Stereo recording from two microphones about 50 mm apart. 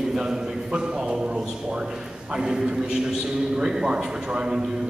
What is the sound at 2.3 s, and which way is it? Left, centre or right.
A man's voice, centre.